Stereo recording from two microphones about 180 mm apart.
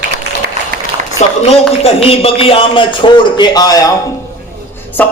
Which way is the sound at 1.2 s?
35° left (ahead or behind).